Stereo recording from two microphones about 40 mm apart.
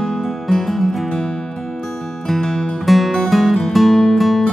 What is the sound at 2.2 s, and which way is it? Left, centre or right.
Music, centre.